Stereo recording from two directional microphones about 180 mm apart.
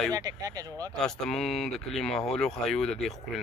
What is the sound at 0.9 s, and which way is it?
Speech, 5° left (ahead or behind).